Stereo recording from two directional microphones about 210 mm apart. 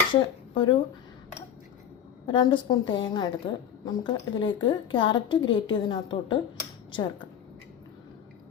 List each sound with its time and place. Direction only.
0.1 s speech: 20° left (ahead or behind)
2.2 s a woman's voice: 20° left (ahead or behind)